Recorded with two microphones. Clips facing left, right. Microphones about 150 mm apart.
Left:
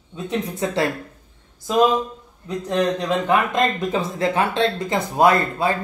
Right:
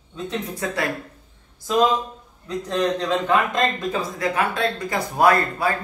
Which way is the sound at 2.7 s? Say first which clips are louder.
Left 1 dB; 15° left (ahead or behind).